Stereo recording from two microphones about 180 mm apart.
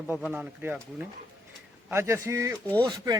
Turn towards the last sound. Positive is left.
turn(degrees=-20)  # may be behind; listen again after turning